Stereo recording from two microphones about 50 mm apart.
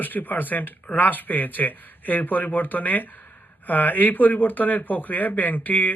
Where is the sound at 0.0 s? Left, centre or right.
Left.